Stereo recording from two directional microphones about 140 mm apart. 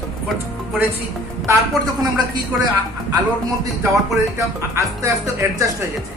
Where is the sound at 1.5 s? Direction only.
30° right (ahead or behind).